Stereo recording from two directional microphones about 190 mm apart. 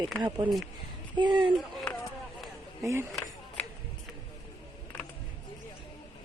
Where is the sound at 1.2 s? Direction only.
25° right (ahead or behind).